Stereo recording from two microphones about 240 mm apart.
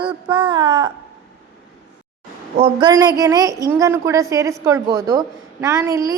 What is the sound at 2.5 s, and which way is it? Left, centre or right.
A woman's voice, right.